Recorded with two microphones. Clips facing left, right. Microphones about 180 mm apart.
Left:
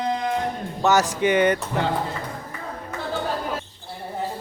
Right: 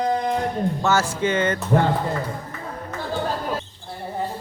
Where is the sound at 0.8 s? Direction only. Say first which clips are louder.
Left 4 dB; 15° left (ahead or behind).